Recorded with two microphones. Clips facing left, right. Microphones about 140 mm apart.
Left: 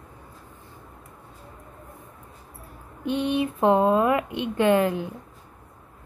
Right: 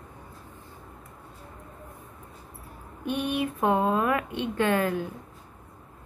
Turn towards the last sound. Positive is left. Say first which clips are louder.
# left 4 dB
turn(degrees=20)  # may be behind; listen again after turning